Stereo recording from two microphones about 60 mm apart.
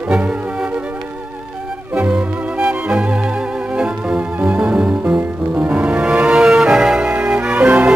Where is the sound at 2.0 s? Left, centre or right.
Right.